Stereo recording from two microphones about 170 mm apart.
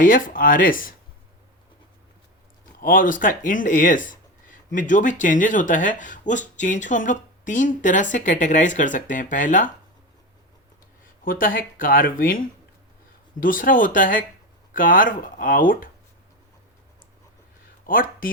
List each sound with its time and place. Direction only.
0.0 s speech: 55° left (ahead or behind)
2.8 s speech: 55° left (ahead or behind)
11.2 s speech: 55° left (ahead or behind)
13.4 s speech: 55° left (ahead or behind)
17.8 s speech: 55° left (ahead or behind)